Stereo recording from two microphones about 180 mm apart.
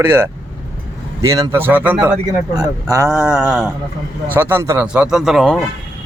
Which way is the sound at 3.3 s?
Centre (ahead or behind).